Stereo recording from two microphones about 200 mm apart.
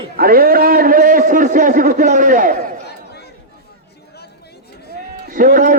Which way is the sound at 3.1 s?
55° left (ahead or behind).